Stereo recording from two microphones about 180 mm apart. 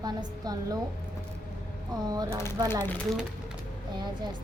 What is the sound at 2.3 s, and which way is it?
Speech, 15° left (ahead or behind).